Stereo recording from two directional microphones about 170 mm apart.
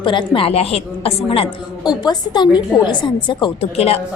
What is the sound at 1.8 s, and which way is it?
A woman's voice, 25° left (ahead or behind).